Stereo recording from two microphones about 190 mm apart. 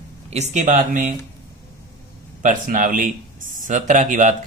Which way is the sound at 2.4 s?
45° right (ahead or behind).